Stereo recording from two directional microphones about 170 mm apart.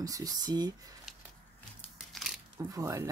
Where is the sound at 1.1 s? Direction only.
5° right (ahead or behind).